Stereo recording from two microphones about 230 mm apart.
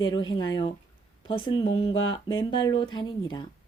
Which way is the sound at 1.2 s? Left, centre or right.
Left.